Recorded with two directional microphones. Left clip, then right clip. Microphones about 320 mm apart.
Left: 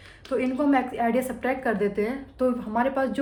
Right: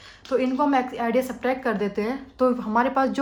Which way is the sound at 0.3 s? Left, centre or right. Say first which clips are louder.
Right 2 dB; centre.